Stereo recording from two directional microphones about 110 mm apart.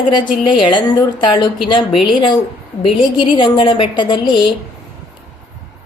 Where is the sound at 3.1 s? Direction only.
50° left (ahead or behind).